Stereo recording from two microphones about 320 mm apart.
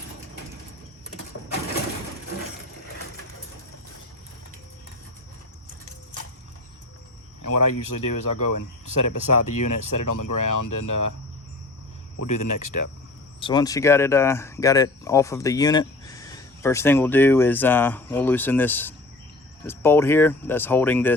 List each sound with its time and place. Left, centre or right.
7.4 s speech: left
12.2 s speech: left
13.4 s speech: centre